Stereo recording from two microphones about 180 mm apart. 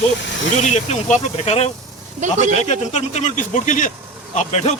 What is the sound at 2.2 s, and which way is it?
Speech, 45° right (ahead or behind).